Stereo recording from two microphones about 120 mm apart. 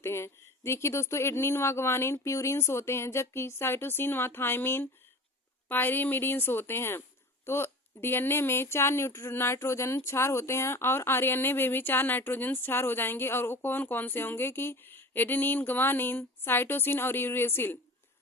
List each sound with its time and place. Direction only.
0.0 s speech: 20° left (ahead or behind)